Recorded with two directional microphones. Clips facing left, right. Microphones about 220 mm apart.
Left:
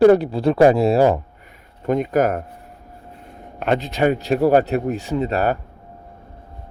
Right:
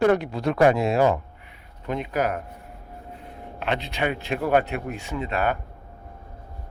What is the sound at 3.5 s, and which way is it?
Speech, 45° left (ahead or behind).